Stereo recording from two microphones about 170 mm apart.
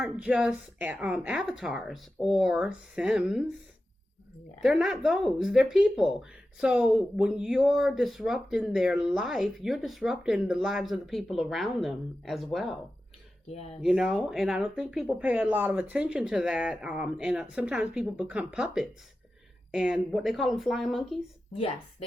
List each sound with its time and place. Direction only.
0.0 s speech: 5° right (ahead or behind)
4.6 s speech: centre (ahead or behind)
13.5 s speech: 35° left (ahead or behind)
13.8 s speech: 5° right (ahead or behind)